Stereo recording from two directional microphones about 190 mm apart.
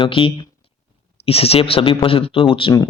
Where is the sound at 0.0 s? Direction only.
30° left (ahead or behind).